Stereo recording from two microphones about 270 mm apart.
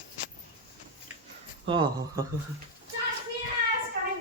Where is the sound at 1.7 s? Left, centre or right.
Centre.